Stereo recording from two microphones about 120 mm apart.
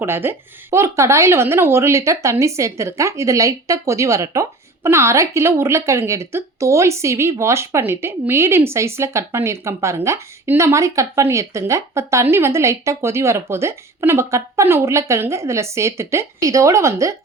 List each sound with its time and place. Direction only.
0.0 s a woman's voice: 20° right (ahead or behind)